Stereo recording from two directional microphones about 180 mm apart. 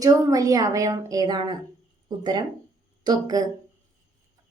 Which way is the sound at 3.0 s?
20° right (ahead or behind).